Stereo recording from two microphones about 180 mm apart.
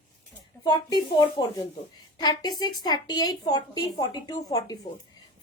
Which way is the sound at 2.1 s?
20° left (ahead or behind).